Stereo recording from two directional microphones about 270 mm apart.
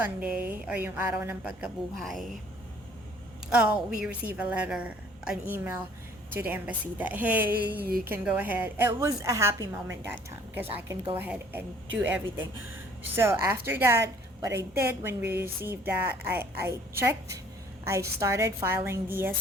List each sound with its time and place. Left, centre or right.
0.0 s speech: centre
3.5 s a woman's voice: centre
7.9 s a woman's voice: right
8.1 s a woman's voice: centre